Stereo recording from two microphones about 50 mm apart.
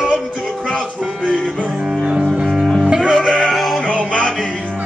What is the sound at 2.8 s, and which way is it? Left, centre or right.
Music, centre.